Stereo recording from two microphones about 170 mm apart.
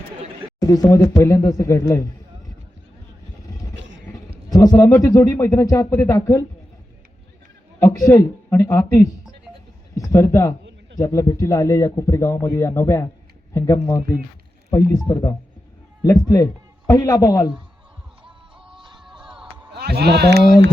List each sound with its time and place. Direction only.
0.6 s speech: 20° left (ahead or behind)
3.8 s music: 90° right
4.4 s speech: 20° left (ahead or behind)
7.8 s speech: 20° left (ahead or behind)
18.3 s music: 5° right (ahead or behind)
19.7 s speech: 70° right (ahead or behind)